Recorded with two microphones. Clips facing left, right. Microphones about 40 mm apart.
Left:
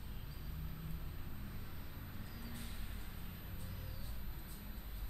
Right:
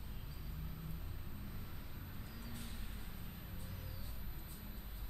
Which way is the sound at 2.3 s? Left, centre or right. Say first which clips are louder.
Even; centre.